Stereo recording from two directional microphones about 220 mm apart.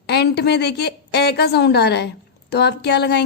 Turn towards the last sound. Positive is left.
turn(degrees=50)  # may be behind; listen again after turning